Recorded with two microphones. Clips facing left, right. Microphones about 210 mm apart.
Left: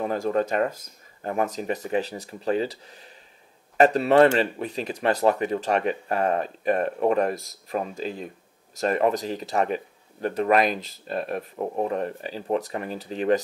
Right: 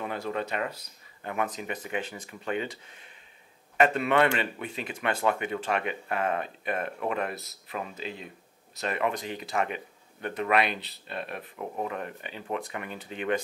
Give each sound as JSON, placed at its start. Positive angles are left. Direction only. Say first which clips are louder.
{"t": 0.0, "sound": "speech", "louder": "left 8 dB", "side_deg": 40}